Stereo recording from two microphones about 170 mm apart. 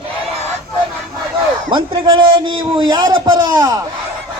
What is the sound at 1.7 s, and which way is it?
A man's voice, 30° right (ahead or behind).